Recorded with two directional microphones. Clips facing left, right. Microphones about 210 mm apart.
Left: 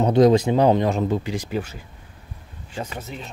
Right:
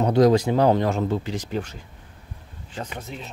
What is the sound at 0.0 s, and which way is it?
Speech, 20° left (ahead or behind).